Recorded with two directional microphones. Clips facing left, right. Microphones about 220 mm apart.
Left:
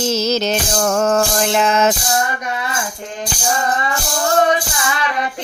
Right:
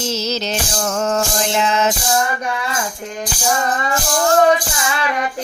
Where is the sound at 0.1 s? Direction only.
50° left (ahead or behind).